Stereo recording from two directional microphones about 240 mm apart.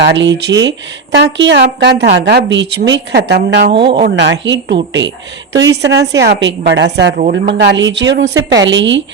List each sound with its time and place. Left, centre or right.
0.0 s a woman's voice: right